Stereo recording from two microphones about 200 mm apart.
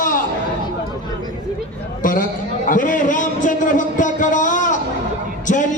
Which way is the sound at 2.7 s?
40° left (ahead or behind).